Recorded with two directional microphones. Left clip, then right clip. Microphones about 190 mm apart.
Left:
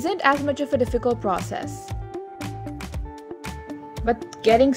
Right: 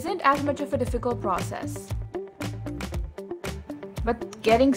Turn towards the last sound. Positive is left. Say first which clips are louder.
# left 3 dB
turn(degrees=5)  # may be behind; listen again after turning